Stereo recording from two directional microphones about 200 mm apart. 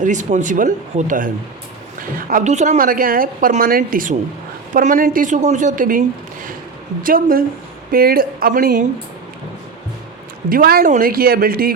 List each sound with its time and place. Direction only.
0.0 s a woman's voice: 40° right (ahead or behind)
10.5 s a woman's voice: 50° right (ahead or behind)